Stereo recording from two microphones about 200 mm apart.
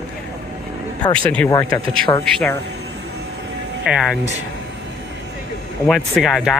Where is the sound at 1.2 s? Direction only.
5° left (ahead or behind).